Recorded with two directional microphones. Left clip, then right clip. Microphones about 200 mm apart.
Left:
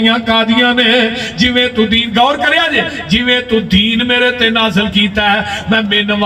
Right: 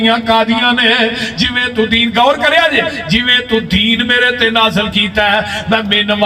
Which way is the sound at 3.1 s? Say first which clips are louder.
Even; 35° right (ahead or behind).